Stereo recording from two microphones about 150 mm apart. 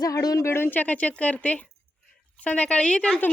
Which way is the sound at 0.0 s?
25° left (ahead or behind).